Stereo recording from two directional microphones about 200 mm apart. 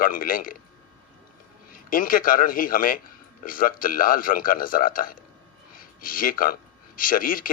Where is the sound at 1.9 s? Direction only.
45° left (ahead or behind).